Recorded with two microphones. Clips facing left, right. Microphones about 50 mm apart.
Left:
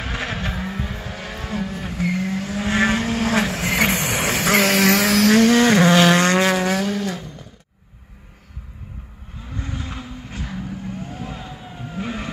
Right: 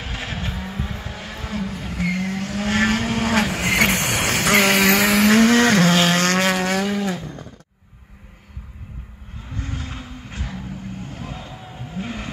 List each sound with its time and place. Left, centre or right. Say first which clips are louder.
0.0 s vehicle: left 3 dB; left
2.0 s vehicle: left 1 dB; centre
3.1 s vehicle: even; centre
5.2 s vehicle: left 1 dB; right
5.7 s vehicle: left 2 dB; left
5.9 s vehicle: left 3 dB; left
6.4 s vehicle: left 1 dB; centre
6.9 s vehicle: right 1 dB; right
9.6 s vehicle: left 1 dB; left
12.0 s vehicle: left 2 dB; centre